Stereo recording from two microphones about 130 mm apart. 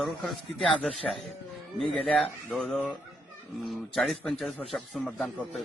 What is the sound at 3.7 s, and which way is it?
A man's voice, centre (ahead or behind).